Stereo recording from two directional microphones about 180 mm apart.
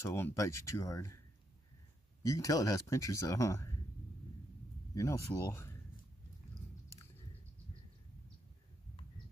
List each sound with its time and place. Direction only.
0.0 s speech: 15° left (ahead or behind)
2.2 s speech: 20° left (ahead or behind)
4.9 s speech: 15° left (ahead or behind)